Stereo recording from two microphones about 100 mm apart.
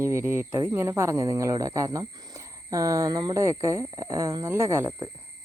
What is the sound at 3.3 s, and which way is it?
Speech, 30° right (ahead or behind).